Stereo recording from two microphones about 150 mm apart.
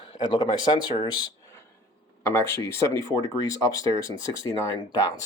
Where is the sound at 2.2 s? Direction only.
15° left (ahead or behind).